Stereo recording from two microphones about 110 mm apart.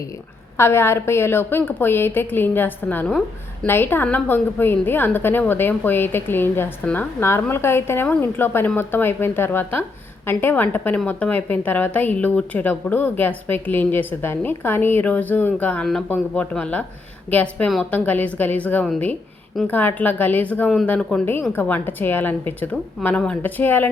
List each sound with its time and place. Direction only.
0.5 s a woman's voice: 25° left (ahead or behind)
3.1 s a woman's voice: 5° left (ahead or behind)
3.7 s a woman's voice: 20° left (ahead or behind)